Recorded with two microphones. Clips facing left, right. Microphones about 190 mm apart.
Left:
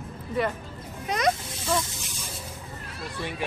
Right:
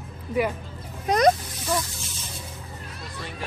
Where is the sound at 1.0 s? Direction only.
40° right (ahead or behind).